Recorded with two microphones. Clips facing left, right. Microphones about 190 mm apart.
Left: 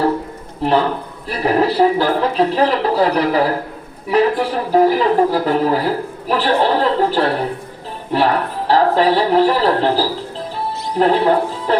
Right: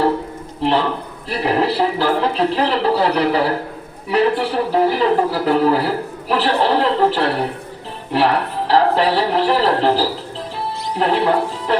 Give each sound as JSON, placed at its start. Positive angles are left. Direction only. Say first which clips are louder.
{"t": 0.6, "sound": "speech", "louder": "left 2 dB", "side_deg": 45}
{"t": 10.5, "sound": "music", "louder": "left 2 dB", "side_deg": 40}